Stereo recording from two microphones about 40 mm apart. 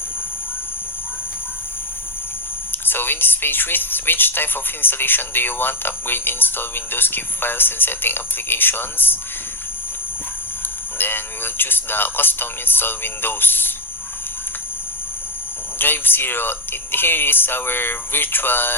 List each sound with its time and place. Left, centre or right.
2.7 s speech: left
10.9 s speech: left
15.8 s speech: left